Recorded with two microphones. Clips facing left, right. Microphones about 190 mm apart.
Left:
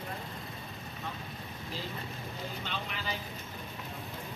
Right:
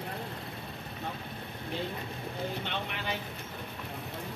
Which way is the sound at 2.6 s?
60° right (ahead or behind).